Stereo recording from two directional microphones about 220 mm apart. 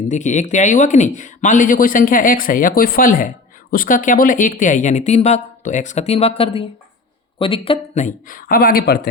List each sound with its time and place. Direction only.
0.1 s speech: 35° left (ahead or behind)